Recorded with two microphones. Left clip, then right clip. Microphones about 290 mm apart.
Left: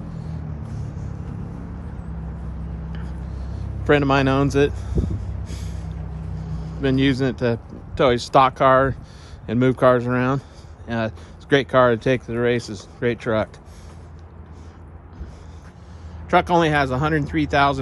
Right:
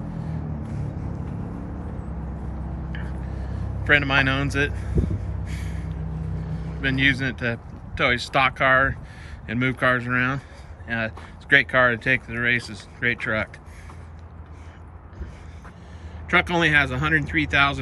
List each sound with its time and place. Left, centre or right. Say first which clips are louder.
2.9 s a sound: right 2 dB; centre
6.8 s speech: left 1 dB; centre
16.3 s speech: left 3 dB; centre